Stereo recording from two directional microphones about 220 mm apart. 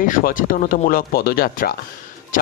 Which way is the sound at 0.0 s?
40° left (ahead or behind).